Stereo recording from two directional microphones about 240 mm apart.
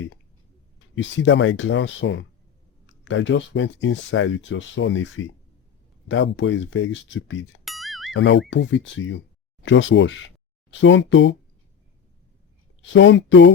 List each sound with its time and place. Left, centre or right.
0.9 s speech: left
7.6 s music: centre
8.1 s speech: left
12.8 s speech: left